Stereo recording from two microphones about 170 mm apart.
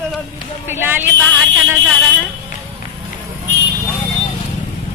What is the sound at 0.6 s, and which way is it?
Speech, 15° right (ahead or behind).